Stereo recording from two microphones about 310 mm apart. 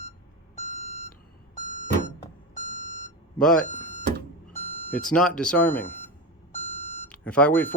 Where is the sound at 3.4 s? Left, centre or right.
Centre.